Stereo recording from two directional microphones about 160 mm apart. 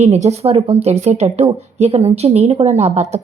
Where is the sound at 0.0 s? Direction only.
45° right (ahead or behind).